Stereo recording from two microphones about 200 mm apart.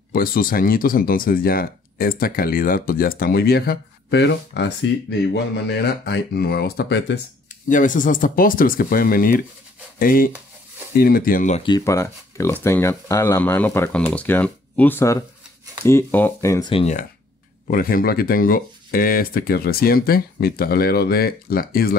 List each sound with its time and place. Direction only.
0.1 s speech: 45° left (ahead or behind)
7.6 s speech: 40° left (ahead or behind)
11.6 s speech: 20° left (ahead or behind)
16.7 s speech: 35° left (ahead or behind)
17.6 s speech: 45° left (ahead or behind)